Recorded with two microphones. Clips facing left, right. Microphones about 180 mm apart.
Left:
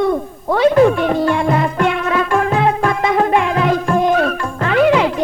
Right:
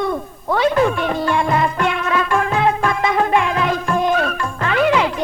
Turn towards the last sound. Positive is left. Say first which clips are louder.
# left 4 dB
turn(degrees=45)  # may be behind; listen again after turning